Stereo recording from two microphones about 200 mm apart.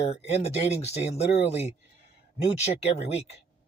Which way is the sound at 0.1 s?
30° left (ahead or behind).